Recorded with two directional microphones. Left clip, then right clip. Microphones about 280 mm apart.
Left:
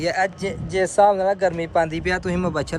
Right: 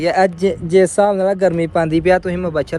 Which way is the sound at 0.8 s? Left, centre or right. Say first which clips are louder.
Right 2 dB; right.